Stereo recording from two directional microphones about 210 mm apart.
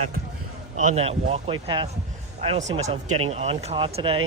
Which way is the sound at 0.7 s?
30° right (ahead or behind).